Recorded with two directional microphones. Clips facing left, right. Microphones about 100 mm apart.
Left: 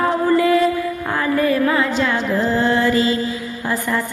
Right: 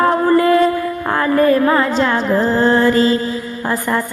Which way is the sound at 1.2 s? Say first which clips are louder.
Right 5 dB; 45° right (ahead or behind).